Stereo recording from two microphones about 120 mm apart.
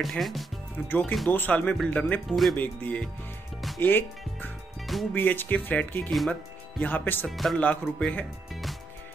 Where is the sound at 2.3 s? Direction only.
Centre (ahead or behind).